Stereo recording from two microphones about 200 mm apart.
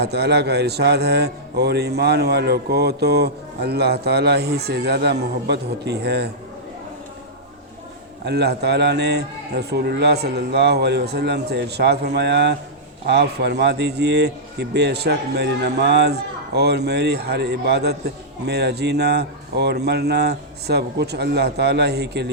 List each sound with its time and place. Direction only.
0.0 s speech: 55° right (ahead or behind)
8.2 s speech: 55° right (ahead or behind)